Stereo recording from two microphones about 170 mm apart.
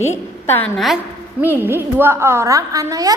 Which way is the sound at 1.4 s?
10° right (ahead or behind).